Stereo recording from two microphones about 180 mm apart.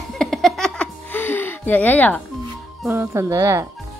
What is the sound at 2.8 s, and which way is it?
Speech, 15° right (ahead or behind).